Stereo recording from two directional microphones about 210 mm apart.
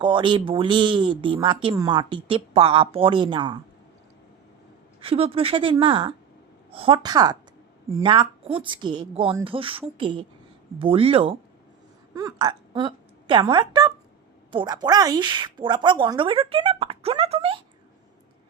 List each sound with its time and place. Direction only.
0.0 s a woman's voice: 25° right (ahead or behind)
4.9 s a woman's voice: 25° right (ahead or behind)